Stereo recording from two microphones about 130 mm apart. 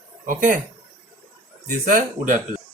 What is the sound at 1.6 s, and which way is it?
Speech, 85° right.